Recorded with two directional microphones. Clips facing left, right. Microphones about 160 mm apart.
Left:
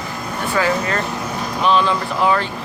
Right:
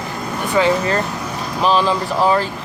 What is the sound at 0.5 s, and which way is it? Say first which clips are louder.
Speech: right 4 dB; 25° right (ahead or behind).